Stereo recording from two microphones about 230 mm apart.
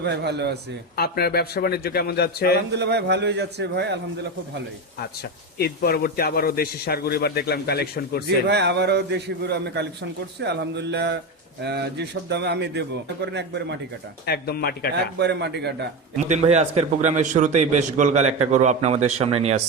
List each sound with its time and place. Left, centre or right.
0.0 s a man's voice: right
0.9 s a man's voice: left
2.7 s a man's voice: right
5.5 s a man's voice: left
8.4 s a man's voice: right
14.3 s a man's voice: left
15.2 s a man's voice: right
16.3 s a man's voice: right